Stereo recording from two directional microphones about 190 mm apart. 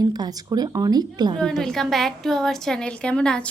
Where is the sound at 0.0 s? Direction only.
20° right (ahead or behind).